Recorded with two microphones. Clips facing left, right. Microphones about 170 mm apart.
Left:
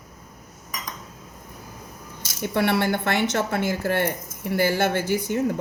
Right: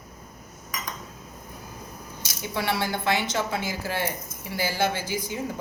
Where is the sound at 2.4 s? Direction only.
55° left (ahead or behind).